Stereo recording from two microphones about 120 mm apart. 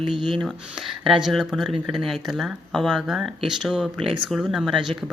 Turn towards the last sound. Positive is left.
turn(degrees=-5)  # may be behind; listen again after turning